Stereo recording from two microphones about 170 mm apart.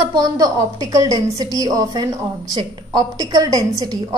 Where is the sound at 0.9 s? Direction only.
20° right (ahead or behind).